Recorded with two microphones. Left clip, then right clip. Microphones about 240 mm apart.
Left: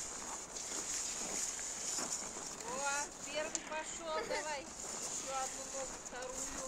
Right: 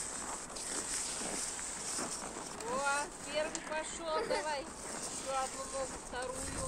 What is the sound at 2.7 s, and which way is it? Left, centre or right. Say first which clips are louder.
Speech: right 5 dB; centre.